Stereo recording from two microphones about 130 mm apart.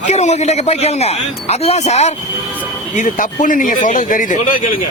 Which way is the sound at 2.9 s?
75° left (ahead or behind).